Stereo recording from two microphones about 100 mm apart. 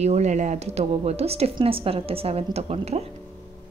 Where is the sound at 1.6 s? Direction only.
70° right (ahead or behind); by 3.0 s 90° right.